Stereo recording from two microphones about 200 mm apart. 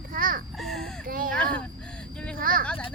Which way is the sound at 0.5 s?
Centre (ahead or behind).